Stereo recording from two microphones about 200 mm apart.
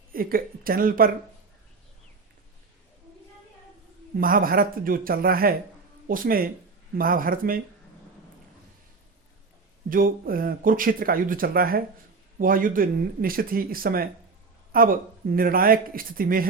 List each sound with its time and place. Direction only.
0.1 s speech: 45° right (ahead or behind)
4.1 s speech: 45° right (ahead or behind)
9.9 s speech: 45° right (ahead or behind)